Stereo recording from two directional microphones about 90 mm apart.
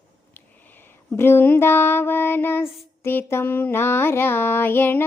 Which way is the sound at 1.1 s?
25° left (ahead or behind).